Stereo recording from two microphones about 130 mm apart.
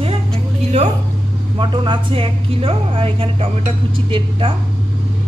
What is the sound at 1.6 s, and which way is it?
Speech, 40° right (ahead or behind).